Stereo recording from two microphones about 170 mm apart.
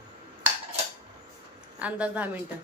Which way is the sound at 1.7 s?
10° right (ahead or behind).